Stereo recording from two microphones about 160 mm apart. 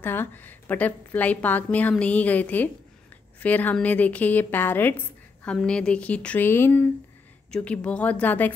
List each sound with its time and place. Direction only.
0.0 s a woman's voice: 15° left (ahead or behind)